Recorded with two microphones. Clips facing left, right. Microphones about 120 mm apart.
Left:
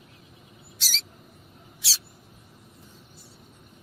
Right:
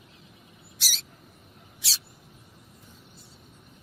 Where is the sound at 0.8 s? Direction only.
10° right (ahead or behind).